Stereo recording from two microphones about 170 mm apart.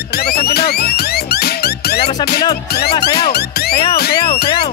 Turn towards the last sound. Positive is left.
turn(degrees=70)  # may be behind; listen again after turning